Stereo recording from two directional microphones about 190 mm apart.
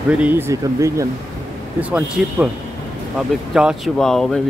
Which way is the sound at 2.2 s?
5° right (ahead or behind).